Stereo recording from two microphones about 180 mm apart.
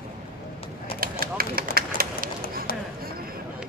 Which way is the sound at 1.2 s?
55° right (ahead or behind).